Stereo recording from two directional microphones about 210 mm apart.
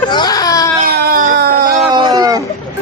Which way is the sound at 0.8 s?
45° right (ahead or behind).